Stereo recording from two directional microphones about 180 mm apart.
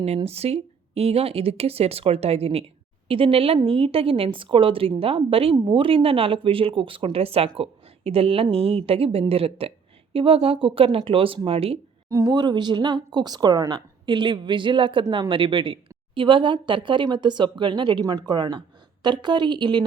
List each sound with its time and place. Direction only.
0.0 s a woman's voice: 35° right (ahead or behind)
12.0 s a woman's voice: 20° right (ahead or behind)